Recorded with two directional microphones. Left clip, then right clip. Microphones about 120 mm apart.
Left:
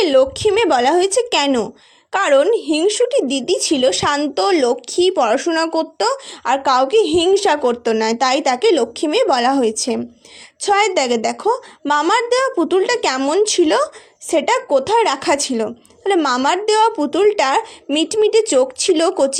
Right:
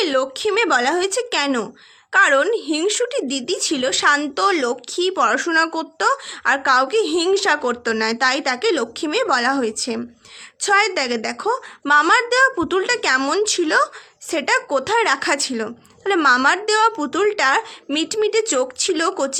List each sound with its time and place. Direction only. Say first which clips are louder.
0.0 s speech: left 6 dB; 25° left (ahead or behind)